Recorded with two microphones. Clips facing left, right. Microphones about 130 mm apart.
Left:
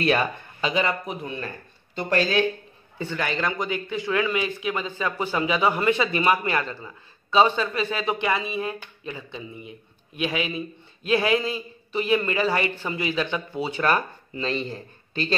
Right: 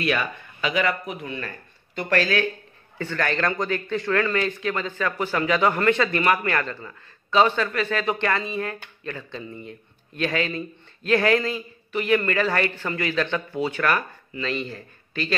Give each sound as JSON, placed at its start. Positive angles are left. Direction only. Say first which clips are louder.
{"t": 0.0, "sound": "a man's voice", "louder": "left 3 dB", "side_deg": 35}